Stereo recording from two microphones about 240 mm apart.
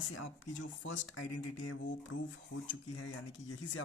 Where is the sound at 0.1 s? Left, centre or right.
Left.